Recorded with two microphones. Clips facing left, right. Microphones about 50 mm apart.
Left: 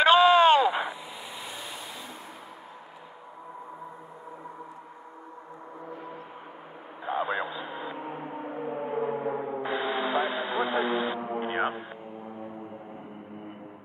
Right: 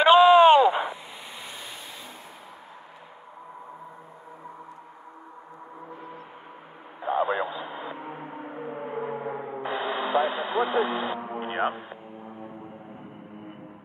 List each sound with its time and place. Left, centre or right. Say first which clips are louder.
0.1 s a sound: right 5 dB; right
7.2 s radio: right 3 dB; right
7.6 s gong: even; centre
9.6 s radio: right 3 dB; right
11.1 s music: left 1 dB; centre